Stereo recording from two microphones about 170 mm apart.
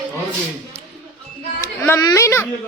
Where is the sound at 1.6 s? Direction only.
15° left (ahead or behind).